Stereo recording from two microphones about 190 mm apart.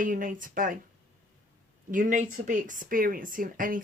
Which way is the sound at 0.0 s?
45° right (ahead or behind).